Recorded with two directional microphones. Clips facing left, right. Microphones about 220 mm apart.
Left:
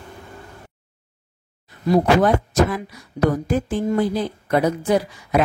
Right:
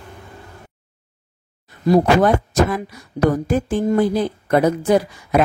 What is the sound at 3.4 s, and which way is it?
A woman's voice, 50° right (ahead or behind).